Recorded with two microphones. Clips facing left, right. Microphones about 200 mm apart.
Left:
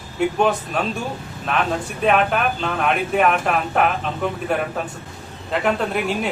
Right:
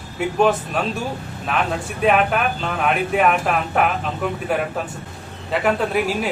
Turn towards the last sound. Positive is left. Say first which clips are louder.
# right 1 dB
turn(degrees=-5)  # may be behind; listen again after turning